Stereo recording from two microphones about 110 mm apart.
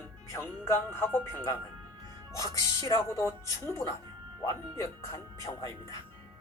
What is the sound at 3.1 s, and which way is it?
Speech, 25° left (ahead or behind).